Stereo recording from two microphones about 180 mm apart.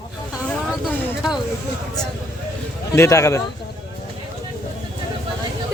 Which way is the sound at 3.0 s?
15° left (ahead or behind).